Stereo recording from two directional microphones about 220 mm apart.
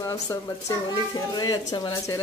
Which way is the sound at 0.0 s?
15° left (ahead or behind).